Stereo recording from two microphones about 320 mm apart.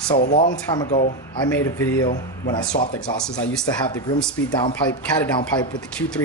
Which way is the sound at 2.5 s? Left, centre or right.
Centre.